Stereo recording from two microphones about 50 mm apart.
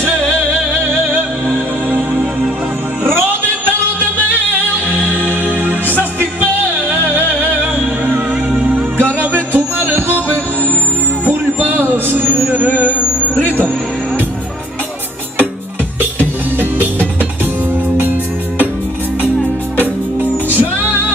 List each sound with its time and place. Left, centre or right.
5.6 s music: right
8.5 s music: right
9.2 s music: right
11.2 s a sound: right
13.4 s music: left
16.0 s music: right
20.2 s music: right